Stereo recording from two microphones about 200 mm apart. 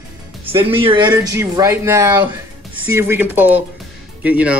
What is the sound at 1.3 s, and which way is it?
Speech, 15° right (ahead or behind).